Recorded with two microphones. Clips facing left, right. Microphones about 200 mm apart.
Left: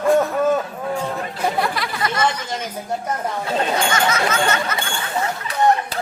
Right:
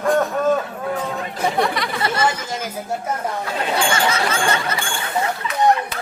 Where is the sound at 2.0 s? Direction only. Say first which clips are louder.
Even; 30° right (ahead or behind).